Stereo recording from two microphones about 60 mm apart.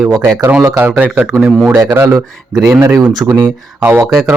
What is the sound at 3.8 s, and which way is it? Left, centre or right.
Speech, right.